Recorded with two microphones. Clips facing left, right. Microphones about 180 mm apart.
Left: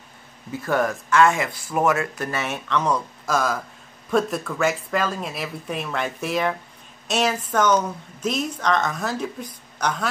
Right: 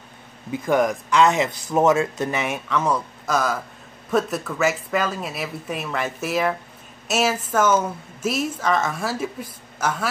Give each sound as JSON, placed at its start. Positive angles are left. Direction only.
{"t": 0.5, "sound": "speech", "side_deg": -15}